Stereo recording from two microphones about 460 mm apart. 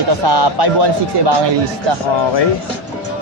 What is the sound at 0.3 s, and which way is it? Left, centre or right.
Speech, right.